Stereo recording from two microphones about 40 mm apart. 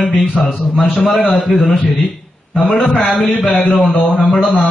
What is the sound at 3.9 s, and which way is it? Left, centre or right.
Speech, left.